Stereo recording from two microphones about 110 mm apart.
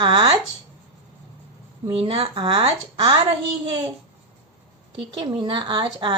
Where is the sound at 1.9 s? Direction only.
60° right (ahead or behind).